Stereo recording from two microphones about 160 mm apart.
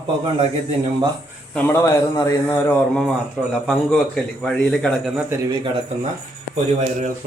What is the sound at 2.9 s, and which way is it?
Speech, centre (ahead or behind).